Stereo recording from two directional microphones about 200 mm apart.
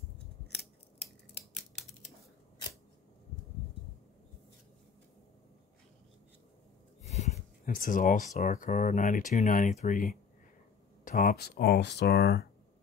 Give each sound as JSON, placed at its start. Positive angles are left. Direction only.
{"t": 7.0, "sound": "speech", "side_deg": 35}
{"t": 11.1, "sound": "speech", "side_deg": 45}